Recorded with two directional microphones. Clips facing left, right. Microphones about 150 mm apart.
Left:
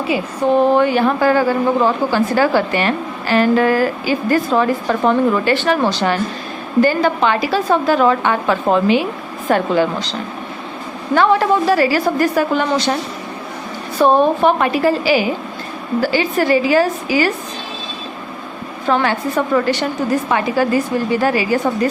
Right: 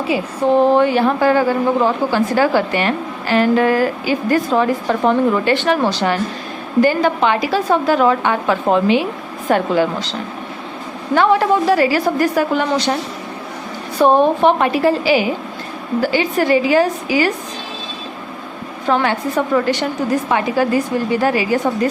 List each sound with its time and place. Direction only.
0.1 s a woman's voice: 30° right (ahead or behind); by 13.0 s 15° right (ahead or behind)
14.0 s a woman's voice: 15° right (ahead or behind)
18.9 s a woman's voice: 15° right (ahead or behind)